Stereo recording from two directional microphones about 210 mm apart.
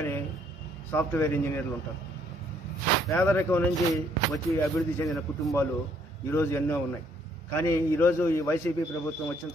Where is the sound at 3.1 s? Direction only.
10° left (ahead or behind).